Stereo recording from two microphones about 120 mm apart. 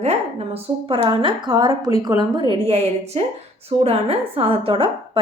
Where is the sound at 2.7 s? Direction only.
60° right (ahead or behind).